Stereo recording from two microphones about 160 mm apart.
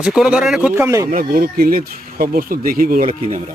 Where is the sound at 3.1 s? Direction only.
50° right (ahead or behind).